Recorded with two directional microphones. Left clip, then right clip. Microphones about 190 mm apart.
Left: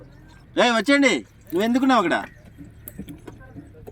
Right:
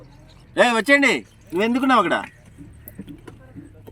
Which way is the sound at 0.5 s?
15° right (ahead or behind).